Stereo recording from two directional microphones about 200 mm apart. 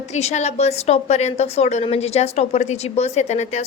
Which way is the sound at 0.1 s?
35° left (ahead or behind).